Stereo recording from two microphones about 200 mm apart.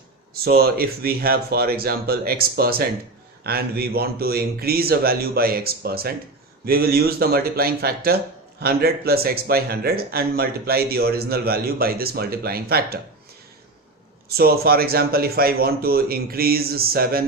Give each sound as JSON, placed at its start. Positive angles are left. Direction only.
{"t": 0.3, "sound": "speech", "side_deg": -50}
{"t": 14.3, "sound": "speech", "side_deg": -50}